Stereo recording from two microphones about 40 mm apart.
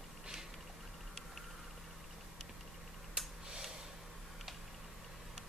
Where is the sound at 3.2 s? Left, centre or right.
Centre.